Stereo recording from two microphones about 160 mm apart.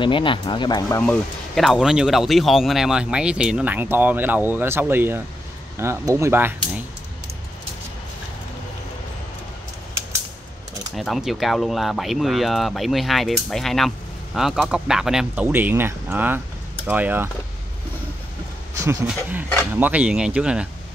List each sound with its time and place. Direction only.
0.0 s speech: 30° left (ahead or behind)
1.0 s speech: 5° left (ahead or behind); by 6.8 s 15° right (ahead or behind)
11.0 s speech: centre (ahead or behind)
19.7 s speech: 10° right (ahead or behind)